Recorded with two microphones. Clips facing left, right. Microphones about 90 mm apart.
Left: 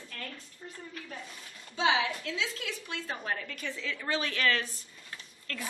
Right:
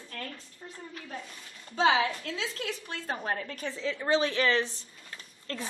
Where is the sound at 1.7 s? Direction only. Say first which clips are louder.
Right 3 dB; 45° right (ahead or behind).